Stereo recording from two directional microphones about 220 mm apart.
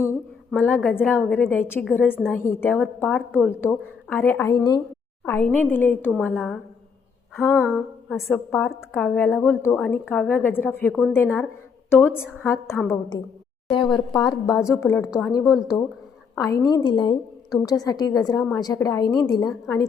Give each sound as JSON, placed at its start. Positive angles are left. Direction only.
{"t": 0.0, "sound": "a woman's voice", "side_deg": 10}
{"t": 2.0, "sound": "a woman's voice", "side_deg": -5}
{"t": 2.3, "sound": "a woman's voice", "side_deg": 10}
{"t": 14.6, "sound": "a woman's voice", "side_deg": 15}